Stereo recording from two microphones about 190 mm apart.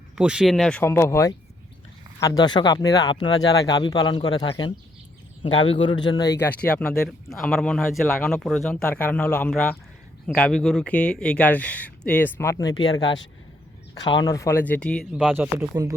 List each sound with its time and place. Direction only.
0.2 s speech: 5° right (ahead or behind)
15.1 s speech: 5° right (ahead or behind)